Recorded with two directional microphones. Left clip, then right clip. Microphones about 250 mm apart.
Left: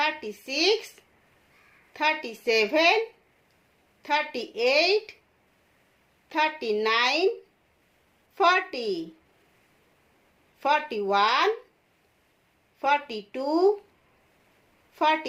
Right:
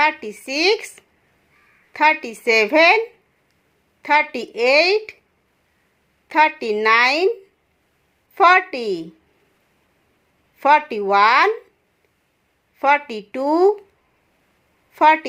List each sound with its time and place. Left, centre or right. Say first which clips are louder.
0.0 s a woman's voice: right 9 dB; right
1.9 s a woman's voice: right 10 dB; right
4.0 s a woman's voice: right 9 dB; right
6.2 s a woman's voice: right 9 dB; right
8.4 s a woman's voice: right 9 dB; right
10.6 s a woman's voice: right 9 dB; right
12.8 s a woman's voice: right 8 dB; right
14.9 s a woman's voice: right 10 dB; right